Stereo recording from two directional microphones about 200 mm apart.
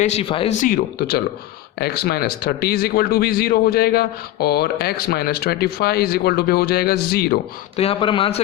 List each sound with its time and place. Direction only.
0.0 s speech: 30° left (ahead or behind)
0.6 s speech: 50° left (ahead or behind)
7.8 s speech: 30° left (ahead or behind)